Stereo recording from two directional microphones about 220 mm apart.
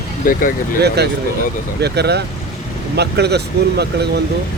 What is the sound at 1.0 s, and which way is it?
Speech, 50° right (ahead or behind).